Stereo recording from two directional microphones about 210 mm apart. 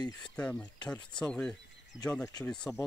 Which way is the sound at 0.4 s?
5° left (ahead or behind).